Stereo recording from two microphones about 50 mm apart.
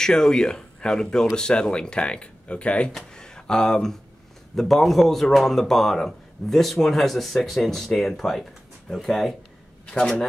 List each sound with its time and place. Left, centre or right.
0.0 s speech: centre
3.2 s a sound: centre
4.6 s speech: centre